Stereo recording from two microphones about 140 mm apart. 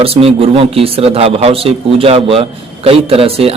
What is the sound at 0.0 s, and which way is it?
A man's voice, 45° right (ahead or behind).